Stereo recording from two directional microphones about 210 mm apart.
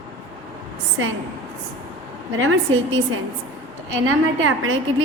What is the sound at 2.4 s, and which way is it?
Speech, 70° right (ahead or behind).